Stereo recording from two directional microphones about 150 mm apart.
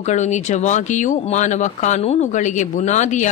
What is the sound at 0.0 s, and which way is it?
Speech, 50° left (ahead or behind).